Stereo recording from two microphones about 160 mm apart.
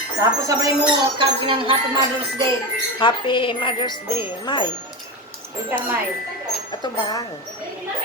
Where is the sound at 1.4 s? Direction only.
30° right (ahead or behind).